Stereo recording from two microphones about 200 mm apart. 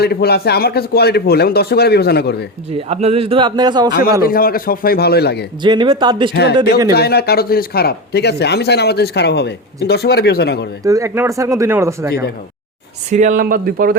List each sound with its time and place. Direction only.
0.0 s speech: 50° left (ahead or behind)
2.7 s a man's voice: 30° right (ahead or behind)
4.2 s speech: 45° left (ahead or behind)
5.6 s a man's voice: 25° right (ahead or behind)
6.3 s speech: 55° left (ahead or behind)
6.6 s a man's voice: 20° right (ahead or behind)
6.9 s speech: 55° left (ahead or behind)
10.8 s speech: 15° right (ahead or behind)
13.1 s speech: 35° right (ahead or behind)